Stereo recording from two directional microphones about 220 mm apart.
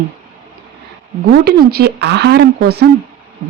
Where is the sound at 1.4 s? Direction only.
45° right (ahead or behind).